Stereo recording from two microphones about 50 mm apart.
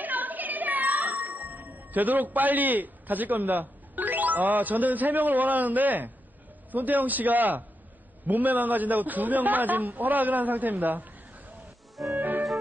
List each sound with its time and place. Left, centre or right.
0.0 s music: right
6.7 s a man's voice: right
12.0 s music: centre